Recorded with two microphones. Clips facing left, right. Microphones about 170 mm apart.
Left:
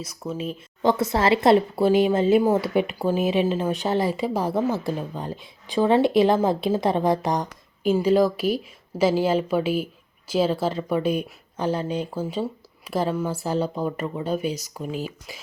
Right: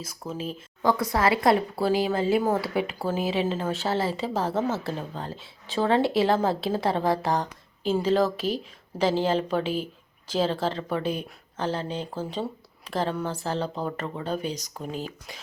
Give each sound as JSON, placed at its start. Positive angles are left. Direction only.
{"t": 0.8, "sound": "speech", "side_deg": 25}